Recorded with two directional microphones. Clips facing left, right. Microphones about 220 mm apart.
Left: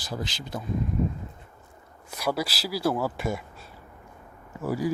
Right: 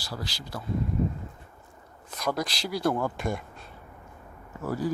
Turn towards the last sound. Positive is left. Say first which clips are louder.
# left 2 dB
turn(degrees=10)  # may be behind; listen again after turning